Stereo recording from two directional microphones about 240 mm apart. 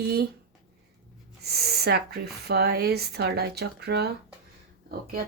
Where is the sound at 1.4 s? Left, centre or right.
Right.